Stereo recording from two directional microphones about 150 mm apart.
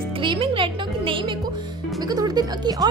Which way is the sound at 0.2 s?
35° right (ahead or behind).